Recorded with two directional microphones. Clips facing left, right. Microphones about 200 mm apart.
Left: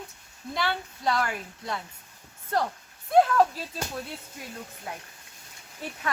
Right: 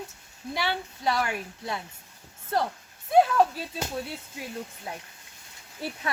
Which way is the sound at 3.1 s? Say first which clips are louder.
Even; 5° right (ahead or behind).